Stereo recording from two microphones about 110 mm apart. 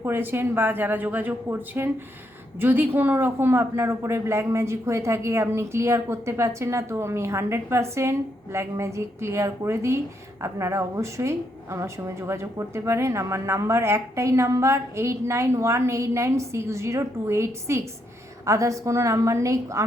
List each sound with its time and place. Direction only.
0.0 s a woman's voice: 20° right (ahead or behind)